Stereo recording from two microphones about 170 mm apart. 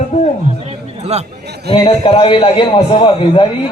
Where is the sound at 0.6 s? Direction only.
40° right (ahead or behind).